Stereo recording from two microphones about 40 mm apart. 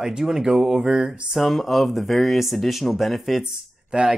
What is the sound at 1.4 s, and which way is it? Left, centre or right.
Speech, centre.